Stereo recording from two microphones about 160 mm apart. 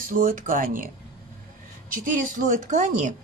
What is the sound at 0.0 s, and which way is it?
Speech, 60° right (ahead or behind).